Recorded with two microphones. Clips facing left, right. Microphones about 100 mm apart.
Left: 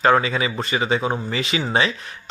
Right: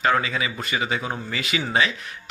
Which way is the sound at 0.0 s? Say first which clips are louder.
Left 5 dB; 35° left (ahead or behind).